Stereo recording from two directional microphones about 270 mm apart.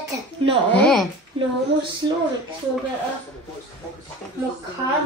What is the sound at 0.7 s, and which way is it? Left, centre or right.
Speech, centre.